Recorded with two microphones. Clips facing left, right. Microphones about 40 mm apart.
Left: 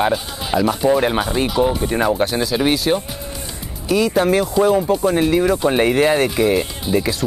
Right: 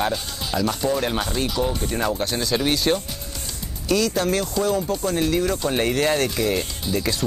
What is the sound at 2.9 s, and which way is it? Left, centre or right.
Speech, centre.